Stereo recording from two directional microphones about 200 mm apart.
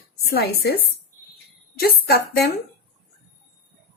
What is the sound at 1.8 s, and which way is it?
Speech, 55° left (ahead or behind).